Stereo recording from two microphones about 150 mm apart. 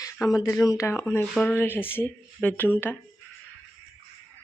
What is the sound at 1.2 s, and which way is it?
Speech, centre (ahead or behind).